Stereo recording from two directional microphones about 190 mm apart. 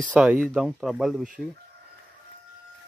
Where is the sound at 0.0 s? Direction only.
5° left (ahead or behind).